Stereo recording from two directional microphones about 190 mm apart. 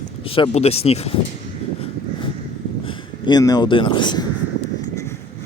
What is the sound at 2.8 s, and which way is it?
Speech, 25° left (ahead or behind).